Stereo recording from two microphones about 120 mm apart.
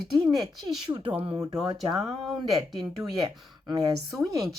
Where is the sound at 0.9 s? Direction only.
30° right (ahead or behind).